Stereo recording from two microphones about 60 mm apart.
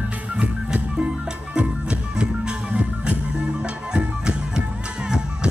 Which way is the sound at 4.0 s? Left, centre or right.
Centre.